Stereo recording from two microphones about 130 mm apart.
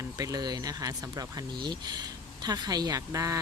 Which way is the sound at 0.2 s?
30° right (ahead or behind).